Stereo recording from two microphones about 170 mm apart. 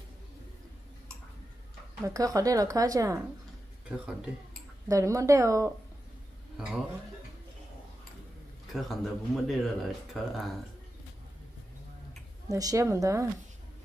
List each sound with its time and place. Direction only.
2.0 s speech: 20° right (ahead or behind)
3.9 s speech: 5° right (ahead or behind)
4.8 s speech: 20° right (ahead or behind)
6.5 s speech: 5° right (ahead or behind)
8.7 s speech: centre (ahead or behind)
12.4 s speech: 20° right (ahead or behind)